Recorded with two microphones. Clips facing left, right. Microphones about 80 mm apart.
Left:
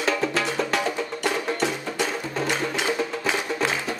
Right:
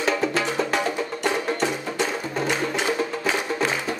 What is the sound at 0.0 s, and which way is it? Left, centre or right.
Music, centre.